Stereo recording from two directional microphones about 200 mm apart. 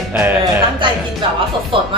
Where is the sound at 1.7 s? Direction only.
25° right (ahead or behind).